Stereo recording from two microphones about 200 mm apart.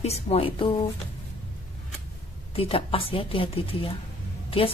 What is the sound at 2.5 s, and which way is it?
A woman's voice, 30° left (ahead or behind).